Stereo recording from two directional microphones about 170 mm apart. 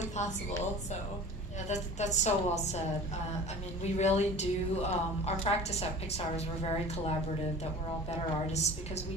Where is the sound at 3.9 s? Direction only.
40° left (ahead or behind).